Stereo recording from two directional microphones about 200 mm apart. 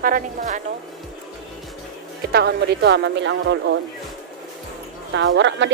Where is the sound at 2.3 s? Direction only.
60° right (ahead or behind).